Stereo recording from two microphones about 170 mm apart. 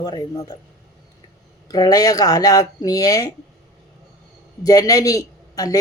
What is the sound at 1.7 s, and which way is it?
Speech, 20° left (ahead or behind).